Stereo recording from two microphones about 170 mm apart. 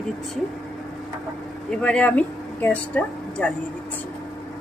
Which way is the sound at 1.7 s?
5° left (ahead or behind).